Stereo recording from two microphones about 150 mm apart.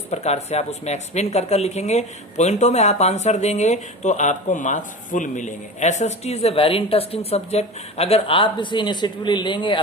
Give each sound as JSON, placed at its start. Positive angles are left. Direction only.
{"t": 0.1, "sound": "a woman's voice", "side_deg": 45}